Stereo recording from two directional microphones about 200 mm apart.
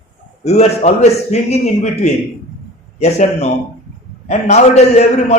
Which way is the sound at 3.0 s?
35° left (ahead or behind).